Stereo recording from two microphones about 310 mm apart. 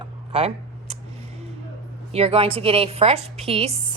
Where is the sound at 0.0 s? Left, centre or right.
Centre.